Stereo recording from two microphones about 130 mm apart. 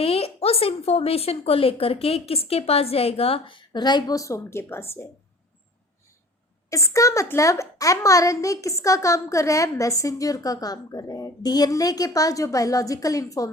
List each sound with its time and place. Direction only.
0.0 s a woman's voice: 50° left (ahead or behind); by 5.0 s 20° left (ahead or behind)
6.7 s a child's voice: 25° left (ahead or behind)